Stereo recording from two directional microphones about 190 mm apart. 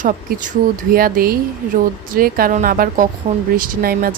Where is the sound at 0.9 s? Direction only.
50° right (ahead or behind).